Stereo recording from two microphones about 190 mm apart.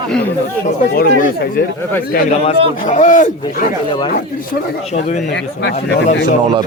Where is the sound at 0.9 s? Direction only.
50° left (ahead or behind).